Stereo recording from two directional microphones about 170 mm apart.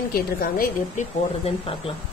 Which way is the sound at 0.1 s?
60° left (ahead or behind).